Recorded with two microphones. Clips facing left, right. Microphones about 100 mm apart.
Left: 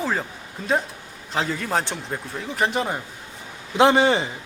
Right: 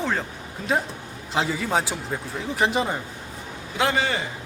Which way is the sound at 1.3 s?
5° right (ahead or behind).